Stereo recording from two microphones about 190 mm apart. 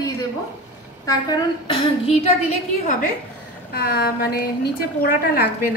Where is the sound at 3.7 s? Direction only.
55° left (ahead or behind).